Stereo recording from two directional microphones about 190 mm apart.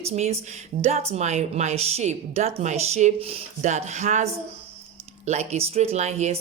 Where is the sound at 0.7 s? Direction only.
50° right (ahead or behind).